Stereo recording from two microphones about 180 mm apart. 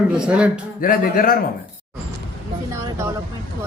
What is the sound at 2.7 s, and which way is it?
Speech, 15° right (ahead or behind).